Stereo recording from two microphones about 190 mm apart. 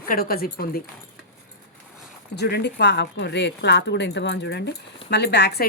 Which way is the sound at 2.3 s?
60° left (ahead or behind).